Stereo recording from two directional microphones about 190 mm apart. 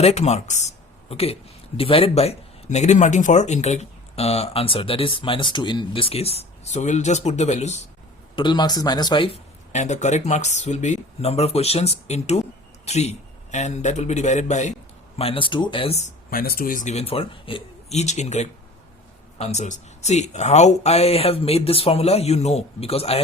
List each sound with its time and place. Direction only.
0.0 s a man's voice: 35° left (ahead or behind)
8.4 s a man's voice: 25° left (ahead or behind)